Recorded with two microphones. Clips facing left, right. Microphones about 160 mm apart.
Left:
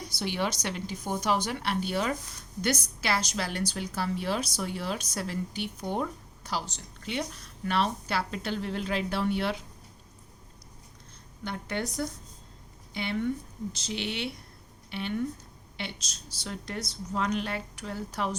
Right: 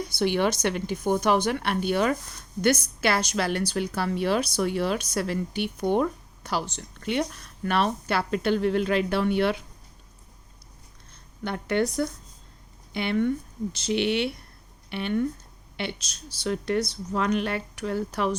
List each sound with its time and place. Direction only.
0.2 s a woman's voice: 60° right (ahead or behind)
11.4 s a woman's voice: 60° right (ahead or behind)